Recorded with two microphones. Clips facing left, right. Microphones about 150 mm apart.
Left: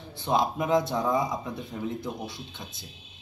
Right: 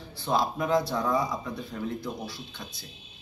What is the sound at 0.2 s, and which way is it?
Speech, 20° left (ahead or behind).